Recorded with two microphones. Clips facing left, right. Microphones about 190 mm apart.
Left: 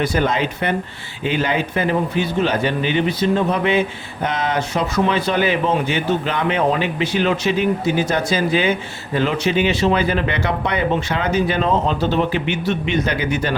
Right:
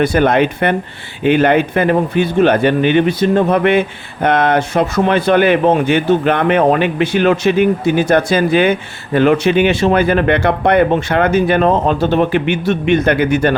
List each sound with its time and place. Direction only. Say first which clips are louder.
0.0 s speech: right 7 dB; 60° right (ahead or behind)